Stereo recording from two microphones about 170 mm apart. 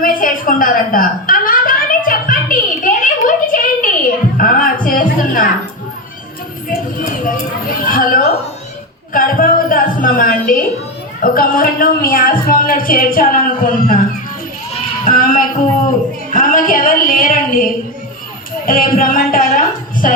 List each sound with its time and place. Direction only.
0.0 s chuckle: 55° left (ahead or behind)
4.4 s music: 55° left (ahead or behind)
6.7 s a sound: 55° left (ahead or behind)
9.1 s speech: 55° left (ahead or behind)
16.3 s female singing: 55° left (ahead or behind)
18.6 s a woman's voice: 55° left (ahead or behind)